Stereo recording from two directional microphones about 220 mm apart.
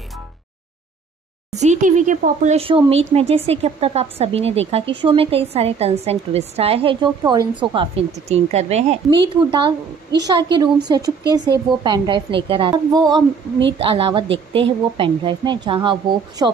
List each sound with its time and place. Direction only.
1.5 s a woman's voice: 30° right (ahead or behind)